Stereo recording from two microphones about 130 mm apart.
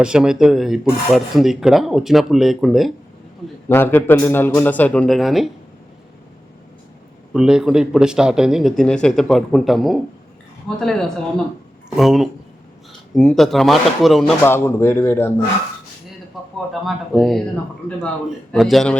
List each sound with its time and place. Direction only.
0.0 s speech: 5° right (ahead or behind)
3.7 s a man's voice: 15° left (ahead or behind); by 5.5 s centre (ahead or behind)
7.3 s speech: 5° right (ahead or behind)
14.4 s speech: 20° left (ahead or behind)
16.4 s a sound: centre (ahead or behind)
16.8 s speech: centre (ahead or behind)
18.5 s speech: centre (ahead or behind)